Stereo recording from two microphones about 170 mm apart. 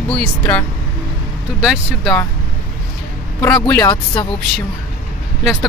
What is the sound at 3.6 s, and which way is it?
Speech, 15° left (ahead or behind).